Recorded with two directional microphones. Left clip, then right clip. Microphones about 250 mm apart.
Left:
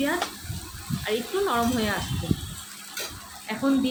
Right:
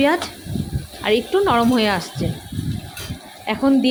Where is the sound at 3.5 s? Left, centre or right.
Right.